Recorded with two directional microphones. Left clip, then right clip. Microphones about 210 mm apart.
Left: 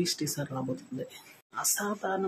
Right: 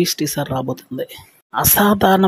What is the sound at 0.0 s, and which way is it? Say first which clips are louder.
Speech: right 13 dB; 40° right (ahead or behind).